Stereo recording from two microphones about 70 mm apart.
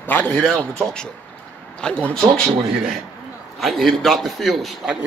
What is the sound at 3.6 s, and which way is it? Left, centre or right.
A man's voice, centre.